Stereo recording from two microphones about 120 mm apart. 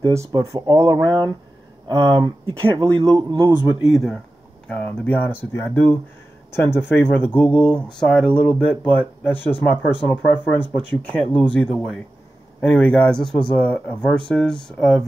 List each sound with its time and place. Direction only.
0.0 s speech: 25° right (ahead or behind)
0.3 s speech: 40° right (ahead or behind)
3.8 s speech: centre (ahead or behind)
4.6 s speech: 10° left (ahead or behind)